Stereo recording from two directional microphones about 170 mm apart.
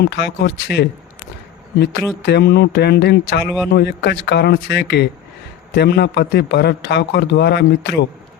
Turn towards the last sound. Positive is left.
turn(degrees=80)